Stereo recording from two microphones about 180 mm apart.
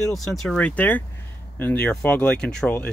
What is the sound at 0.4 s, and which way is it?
Speech, 5° left (ahead or behind).